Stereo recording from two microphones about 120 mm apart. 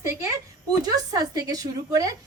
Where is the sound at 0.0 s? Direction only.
25° right (ahead or behind).